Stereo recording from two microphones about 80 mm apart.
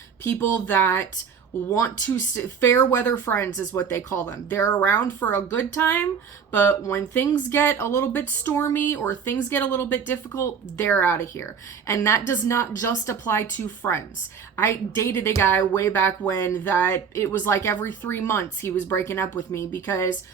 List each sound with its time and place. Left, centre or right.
0.3 s speech: left
4.9 s speech: left